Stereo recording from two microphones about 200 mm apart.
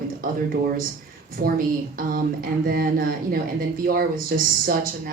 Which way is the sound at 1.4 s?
45° right (ahead or behind).